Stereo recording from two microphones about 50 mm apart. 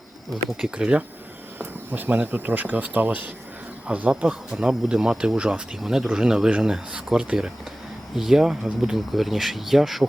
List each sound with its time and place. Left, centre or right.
0.6 s speech: centre
1.5 s speech: right
4.1 s speech: centre